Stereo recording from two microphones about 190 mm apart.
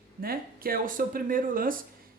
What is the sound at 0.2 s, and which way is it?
Speech, 50° right (ahead or behind).